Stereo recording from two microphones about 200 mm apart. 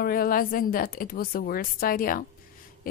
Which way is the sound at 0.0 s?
45° left (ahead or behind).